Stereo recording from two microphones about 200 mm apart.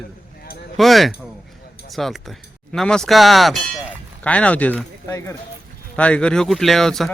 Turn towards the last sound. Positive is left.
turn(degrees=0)  # may be behind; listen again after turning